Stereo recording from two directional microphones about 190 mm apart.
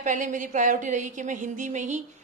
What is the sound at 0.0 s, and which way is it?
A woman's voice, 40° right (ahead or behind).